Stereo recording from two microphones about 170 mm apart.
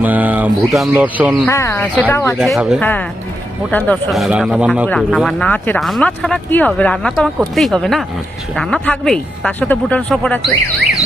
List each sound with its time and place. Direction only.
0.0 s speech: 10° right (ahead or behind)
1.5 s speech: 15° left (ahead or behind)
2.4 s a man's voice: centre (ahead or behind)
3.7 s speech: 10° left (ahead or behind)
4.1 s a man's voice: 5° right (ahead or behind)